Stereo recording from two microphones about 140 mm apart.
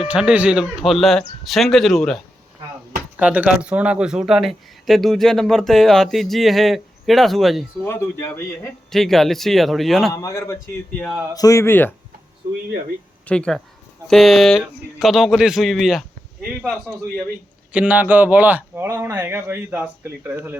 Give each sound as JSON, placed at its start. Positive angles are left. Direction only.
{"t": 0.0, "sound": "speech", "side_deg": -5}
{"t": 3.2, "sound": "speech", "side_deg": -10}
{"t": 7.9, "sound": "a man's voice", "side_deg": 15}
{"t": 8.9, "sound": "speech", "side_deg": 0}
{"t": 10.1, "sound": "a man's voice", "side_deg": 25}
{"t": 13.2, "sound": "a man's voice", "side_deg": 5}
{"t": 17.7, "sound": "a man's voice", "side_deg": -10}